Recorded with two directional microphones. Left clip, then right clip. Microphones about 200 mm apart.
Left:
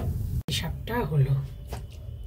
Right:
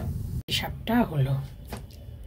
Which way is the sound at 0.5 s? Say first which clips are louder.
Right 4 dB; 35° right (ahead or behind).